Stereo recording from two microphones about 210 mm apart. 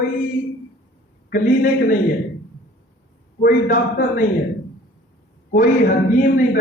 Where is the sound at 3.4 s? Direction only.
40° left (ahead or behind).